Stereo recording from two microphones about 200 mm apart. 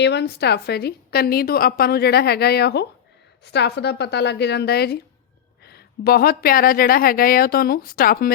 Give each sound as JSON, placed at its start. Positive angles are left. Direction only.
{"t": 0.0, "sound": "a woman's voice", "side_deg": 55}